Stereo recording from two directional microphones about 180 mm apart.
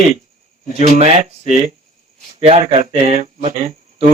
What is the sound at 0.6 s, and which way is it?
Speech, 35° right (ahead or behind).